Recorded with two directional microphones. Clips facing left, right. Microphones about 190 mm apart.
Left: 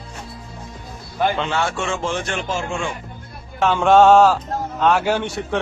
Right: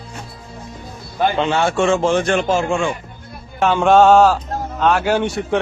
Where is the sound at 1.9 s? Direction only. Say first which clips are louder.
Right 8 dB; 45° right (ahead or behind).